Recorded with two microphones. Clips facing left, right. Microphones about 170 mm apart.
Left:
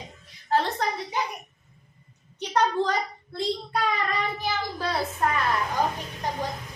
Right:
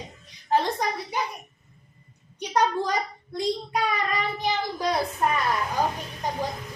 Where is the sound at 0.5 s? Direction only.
15° right (ahead or behind).